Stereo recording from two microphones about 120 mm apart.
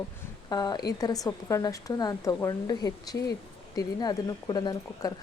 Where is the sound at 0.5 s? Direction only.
35° left (ahead or behind).